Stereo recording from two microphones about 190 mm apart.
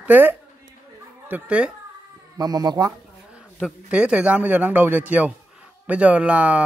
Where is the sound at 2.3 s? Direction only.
20° right (ahead or behind).